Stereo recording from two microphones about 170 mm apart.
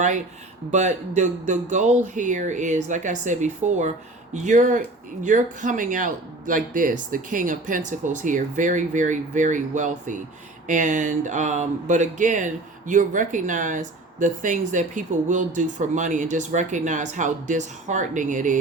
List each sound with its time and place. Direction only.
0.7 s speech: 45° right (ahead or behind)